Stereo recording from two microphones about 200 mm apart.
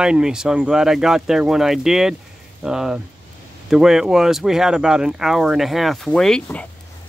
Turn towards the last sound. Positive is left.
turn(degrees=5)  # may be behind; listen again after turning